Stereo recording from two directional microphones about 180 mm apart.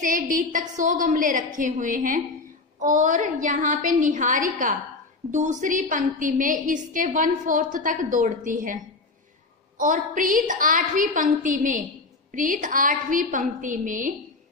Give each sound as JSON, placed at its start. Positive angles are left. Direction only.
{"t": 0.0, "sound": "a woman's voice", "side_deg": -50}
{"t": 9.8, "sound": "a woman's voice", "side_deg": -45}